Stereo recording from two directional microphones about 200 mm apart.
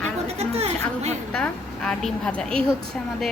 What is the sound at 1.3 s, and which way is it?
A woman's voice, 5° left (ahead or behind).